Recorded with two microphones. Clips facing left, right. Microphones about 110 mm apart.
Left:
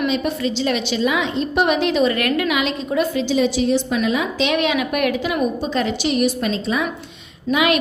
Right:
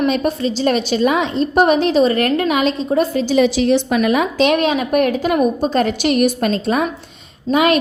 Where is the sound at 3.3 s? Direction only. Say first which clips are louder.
Right 5 dB; 75° right (ahead or behind); by 6.8 s 50° right (ahead or behind).